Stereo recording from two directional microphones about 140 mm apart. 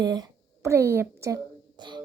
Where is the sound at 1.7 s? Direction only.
35° right (ahead or behind).